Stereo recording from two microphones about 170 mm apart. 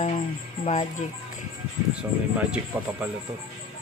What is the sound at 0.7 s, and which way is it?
Speech, 45° left (ahead or behind).